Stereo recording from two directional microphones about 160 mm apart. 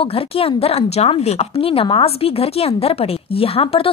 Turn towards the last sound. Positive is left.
turn(degrees=35)  # may be behind; listen again after turning